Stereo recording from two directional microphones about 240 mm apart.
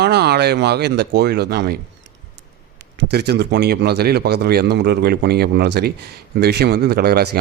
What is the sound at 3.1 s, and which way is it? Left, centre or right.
A man's voice, right.